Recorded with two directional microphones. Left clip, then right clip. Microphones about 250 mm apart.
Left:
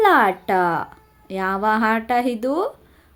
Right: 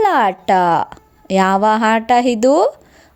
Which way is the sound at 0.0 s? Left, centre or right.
Right.